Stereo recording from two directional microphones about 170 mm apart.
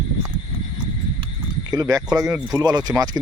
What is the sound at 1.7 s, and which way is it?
Speech, 20° right (ahead or behind).